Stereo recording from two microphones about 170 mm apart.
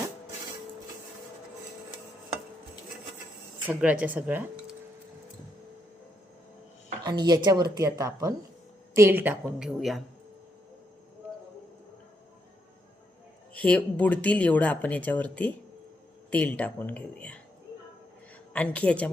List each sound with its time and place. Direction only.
3.7 s a woman's voice: 5° right (ahead or behind)
7.0 s a woman's voice: 25° right (ahead or behind); by 10.0 s centre (ahead or behind)
13.5 s speech: 10° left (ahead or behind)
18.5 s speech: 10° left (ahead or behind)